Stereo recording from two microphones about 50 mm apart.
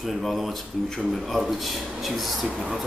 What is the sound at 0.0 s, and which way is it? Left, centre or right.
Speech, centre.